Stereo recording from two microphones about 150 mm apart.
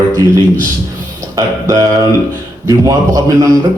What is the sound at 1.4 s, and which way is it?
A man's voice, 20° right (ahead or behind).